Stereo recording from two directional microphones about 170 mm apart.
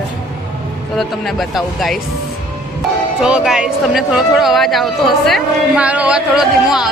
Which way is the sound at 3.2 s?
5° right (ahead or behind).